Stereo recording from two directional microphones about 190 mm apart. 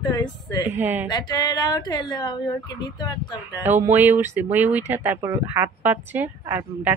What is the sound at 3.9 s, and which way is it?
Speech, 10° right (ahead or behind).